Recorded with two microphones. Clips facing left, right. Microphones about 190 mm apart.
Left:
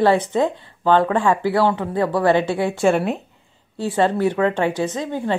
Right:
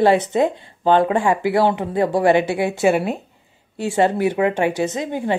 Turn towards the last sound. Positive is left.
turn(degrees=-15)  # may be behind; listen again after turning